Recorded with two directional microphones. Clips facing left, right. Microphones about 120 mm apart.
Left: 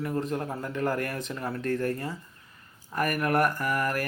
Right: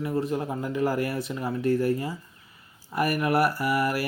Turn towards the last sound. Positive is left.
turn(degrees=-10)  # may be behind; listen again after turning